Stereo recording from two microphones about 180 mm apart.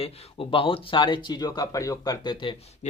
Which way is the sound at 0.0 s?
30° left (ahead or behind).